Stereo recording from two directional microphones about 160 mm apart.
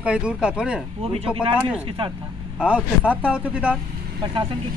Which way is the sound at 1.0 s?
35° right (ahead or behind).